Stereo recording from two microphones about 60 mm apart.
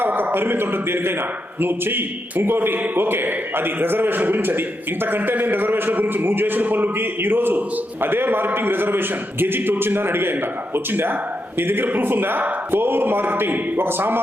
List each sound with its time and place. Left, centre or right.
0.0 s speech: right